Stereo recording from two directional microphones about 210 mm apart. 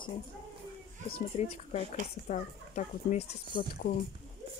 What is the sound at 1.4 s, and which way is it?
Speech, 35° left (ahead or behind).